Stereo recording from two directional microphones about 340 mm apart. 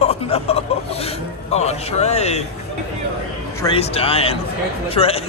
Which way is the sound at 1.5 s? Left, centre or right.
Centre.